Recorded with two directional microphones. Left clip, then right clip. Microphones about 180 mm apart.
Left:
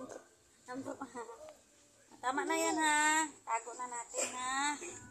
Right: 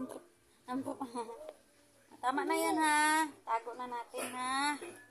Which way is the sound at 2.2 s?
5° right (ahead or behind).